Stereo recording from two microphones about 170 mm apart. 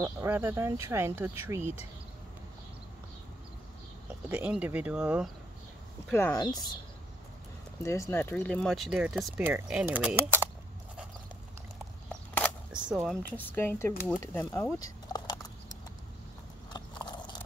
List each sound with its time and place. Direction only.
0.0 s speech: 15° right (ahead or behind)
4.3 s speech: 5° right (ahead or behind)
6.0 s speech: 15° left (ahead or behind)
6.3 s speech: 25° left (ahead or behind)
7.8 s speech: 15° left (ahead or behind); by 10.4 s 10° right (ahead or behind)
12.9 s speech: centre (ahead or behind)
13.4 s speech: 10° left (ahead or behind)
14.4 s a sound: 15° left (ahead or behind)
16.7 s biting: 25° left (ahead or behind)